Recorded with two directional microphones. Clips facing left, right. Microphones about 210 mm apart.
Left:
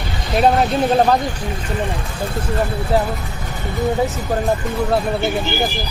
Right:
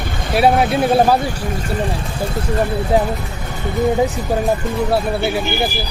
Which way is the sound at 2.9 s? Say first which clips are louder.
Right 2 dB; 15° right (ahead or behind).